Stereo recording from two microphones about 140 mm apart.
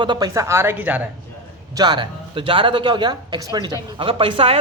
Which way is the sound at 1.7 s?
30° right (ahead or behind).